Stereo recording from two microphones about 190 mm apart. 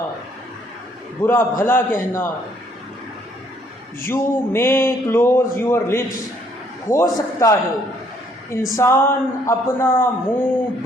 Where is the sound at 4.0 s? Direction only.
10° left (ahead or behind).